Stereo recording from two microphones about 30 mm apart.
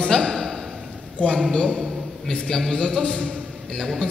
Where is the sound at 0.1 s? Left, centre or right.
Centre.